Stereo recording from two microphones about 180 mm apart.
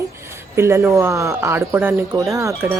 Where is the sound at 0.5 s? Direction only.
15° right (ahead or behind).